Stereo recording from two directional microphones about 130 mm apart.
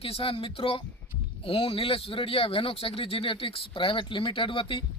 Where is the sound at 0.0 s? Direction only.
45° left (ahead or behind).